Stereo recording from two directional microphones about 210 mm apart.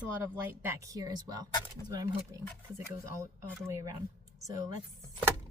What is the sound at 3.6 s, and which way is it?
Speech, 15° right (ahead or behind).